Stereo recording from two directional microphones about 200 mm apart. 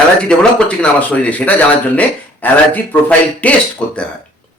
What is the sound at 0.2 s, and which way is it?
Speech, 5° left (ahead or behind).